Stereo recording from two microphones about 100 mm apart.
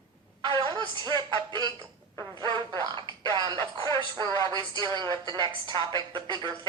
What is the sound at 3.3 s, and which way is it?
Music, 50° right (ahead or behind).